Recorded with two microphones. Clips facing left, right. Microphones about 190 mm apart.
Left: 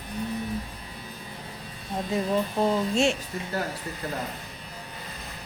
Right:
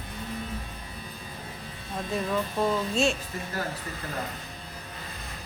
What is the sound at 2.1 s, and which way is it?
Speech, 20° left (ahead or behind).